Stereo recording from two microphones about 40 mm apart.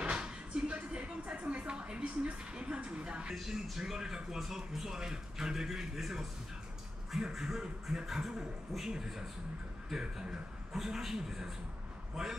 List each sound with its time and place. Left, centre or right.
0.0 s a sound: right
2.5 s music: right
3.3 s speech: centre
7.3 s a man's voice: centre